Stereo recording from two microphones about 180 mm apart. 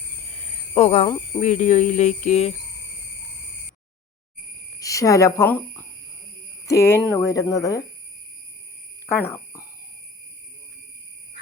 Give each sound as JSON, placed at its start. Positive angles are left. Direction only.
{"t": 0.7, "sound": "speech", "side_deg": 40}
{"t": 4.8, "sound": "speech", "side_deg": 20}
{"t": 9.0, "sound": "cricket", "side_deg": 10}